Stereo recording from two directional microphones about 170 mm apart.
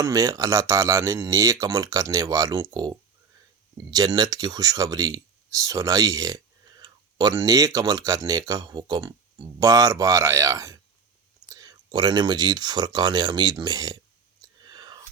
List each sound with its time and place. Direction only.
0.0 s speech: 20° right (ahead or behind)
14.6 s whispering: 25° right (ahead or behind)